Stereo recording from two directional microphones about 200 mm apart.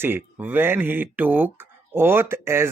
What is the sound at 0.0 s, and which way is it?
Speech, 10° right (ahead or behind).